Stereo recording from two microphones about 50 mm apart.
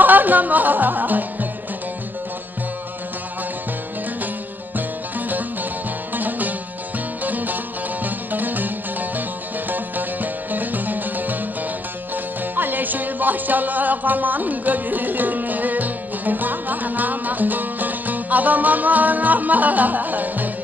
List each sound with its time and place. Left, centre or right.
0.0 s music: right
6.1 s music: right
12.5 s music: right